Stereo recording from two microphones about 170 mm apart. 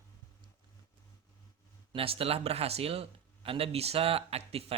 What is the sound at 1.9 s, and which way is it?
Speech, 35° right (ahead or behind).